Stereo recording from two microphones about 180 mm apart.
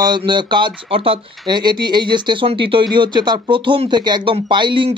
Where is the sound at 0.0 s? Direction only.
25° right (ahead or behind).